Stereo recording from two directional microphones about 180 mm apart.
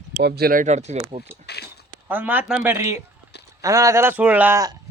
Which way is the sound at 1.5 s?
65° left (ahead or behind).